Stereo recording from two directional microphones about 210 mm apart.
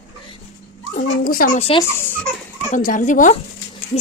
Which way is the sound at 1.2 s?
45° left (ahead or behind).